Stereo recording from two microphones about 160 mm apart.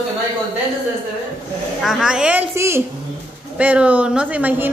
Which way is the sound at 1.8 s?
5° right (ahead or behind).